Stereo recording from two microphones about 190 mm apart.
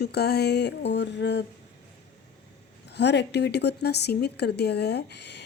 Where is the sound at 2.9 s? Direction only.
65° left (ahead or behind).